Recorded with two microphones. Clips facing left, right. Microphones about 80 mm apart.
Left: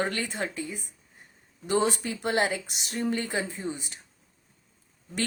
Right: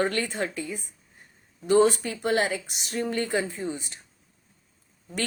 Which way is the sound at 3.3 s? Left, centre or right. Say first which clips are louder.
Right 4 dB; right.